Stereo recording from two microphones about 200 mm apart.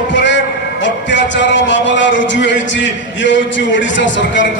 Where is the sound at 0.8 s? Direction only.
65° left (ahead or behind).